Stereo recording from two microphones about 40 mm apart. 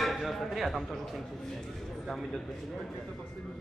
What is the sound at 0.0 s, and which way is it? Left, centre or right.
A man's voice, centre.